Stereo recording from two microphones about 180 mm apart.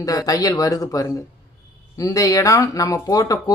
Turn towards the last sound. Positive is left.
turn(degrees=20)  # may be behind; listen again after turning